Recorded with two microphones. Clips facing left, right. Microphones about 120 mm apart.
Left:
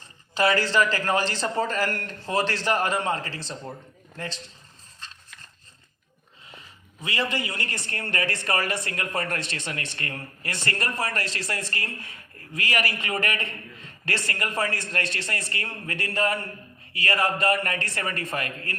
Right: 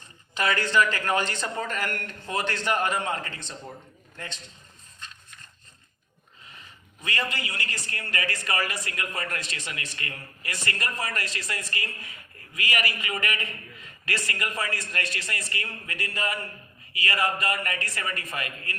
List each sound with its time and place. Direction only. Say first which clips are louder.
0.3 s speech: left 2 dB; 35° left (ahead or behind)
6.5 s a sound: left 3 dB; 30° left (ahead or behind)
7.5 s a man's voice: left 2 dB; 55° left (ahead or behind)
9.6 s speech: left 3 dB; 65° left (ahead or behind); by 10.5 s 45° left (ahead or behind)
11.3 s a man's voice: left 3 dB; 65° left (ahead or behind)
12.4 s a man's voice: left 2 dB; 50° left (ahead or behind)